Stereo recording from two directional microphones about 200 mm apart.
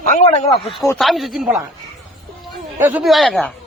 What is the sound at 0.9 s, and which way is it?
Speech, centre (ahead or behind).